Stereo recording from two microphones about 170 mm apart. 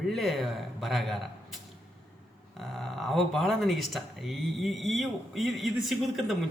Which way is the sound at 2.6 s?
Centre (ahead or behind).